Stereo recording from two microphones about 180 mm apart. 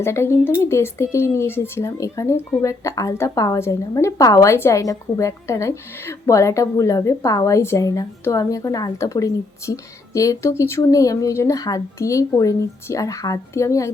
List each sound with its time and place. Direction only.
0.0 s speech: 15° left (ahead or behind)